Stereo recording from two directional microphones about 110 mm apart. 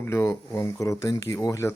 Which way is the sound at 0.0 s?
25° left (ahead or behind).